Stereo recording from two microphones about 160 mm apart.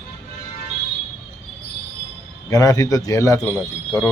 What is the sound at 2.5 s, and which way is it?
Speech, 20° left (ahead or behind).